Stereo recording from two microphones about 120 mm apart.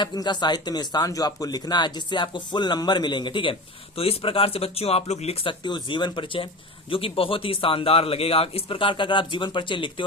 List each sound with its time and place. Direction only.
0.0 s a man's voice: 35° left (ahead or behind)